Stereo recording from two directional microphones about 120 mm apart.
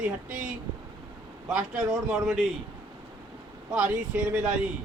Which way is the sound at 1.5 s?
5° right (ahead or behind).